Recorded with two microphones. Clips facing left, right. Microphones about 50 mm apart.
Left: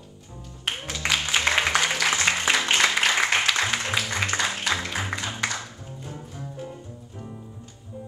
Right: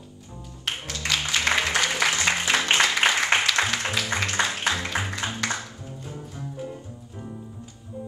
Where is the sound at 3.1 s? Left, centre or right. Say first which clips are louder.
Right 1 dB; right.